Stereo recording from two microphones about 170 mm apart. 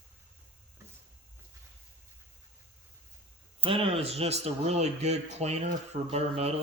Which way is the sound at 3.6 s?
35° right (ahead or behind).